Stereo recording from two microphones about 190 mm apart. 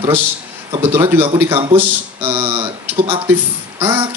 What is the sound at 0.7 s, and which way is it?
Speech, 15° right (ahead or behind).